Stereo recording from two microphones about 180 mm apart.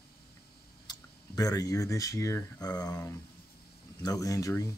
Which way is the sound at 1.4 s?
20° left (ahead or behind).